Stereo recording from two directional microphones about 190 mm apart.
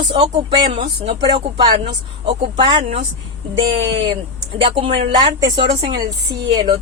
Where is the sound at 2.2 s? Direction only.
25° right (ahead or behind).